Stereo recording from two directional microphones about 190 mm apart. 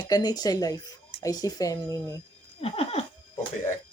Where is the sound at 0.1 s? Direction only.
20° left (ahead or behind).